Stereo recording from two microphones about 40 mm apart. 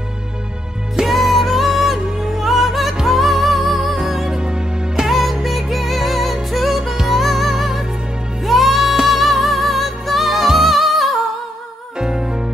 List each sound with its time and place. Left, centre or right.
0.9 s music: centre
4.4 s music: centre
5.0 s music: centre
12.0 s music: centre